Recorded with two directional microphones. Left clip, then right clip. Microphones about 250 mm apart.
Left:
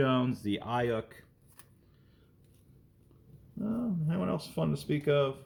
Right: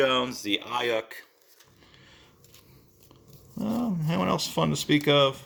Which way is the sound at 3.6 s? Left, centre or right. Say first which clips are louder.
Right 5 dB; right.